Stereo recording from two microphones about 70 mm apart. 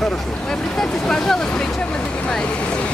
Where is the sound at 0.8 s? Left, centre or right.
Centre.